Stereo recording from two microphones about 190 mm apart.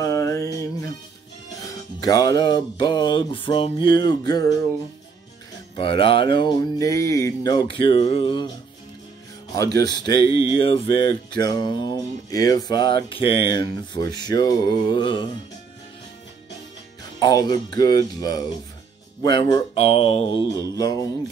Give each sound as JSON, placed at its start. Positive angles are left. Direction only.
{"t": 0.0, "sound": "music", "side_deg": 15}
{"t": 5.8, "sound": "music", "side_deg": 30}
{"t": 9.8, "sound": "music", "side_deg": 20}
{"t": 17.2, "sound": "music", "side_deg": 20}